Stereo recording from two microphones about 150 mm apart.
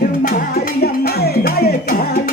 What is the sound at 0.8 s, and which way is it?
Music, 90° left.